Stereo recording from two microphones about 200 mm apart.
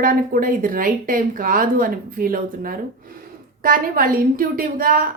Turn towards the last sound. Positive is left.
turn(degrees=-45)  # may be behind; listen again after turning